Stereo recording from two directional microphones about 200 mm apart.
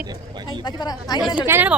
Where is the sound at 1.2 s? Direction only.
10° right (ahead or behind).